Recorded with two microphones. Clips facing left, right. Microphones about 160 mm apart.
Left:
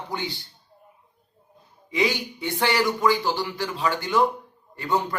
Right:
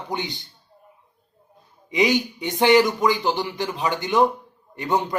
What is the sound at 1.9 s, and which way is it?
Speech, 20° right (ahead or behind).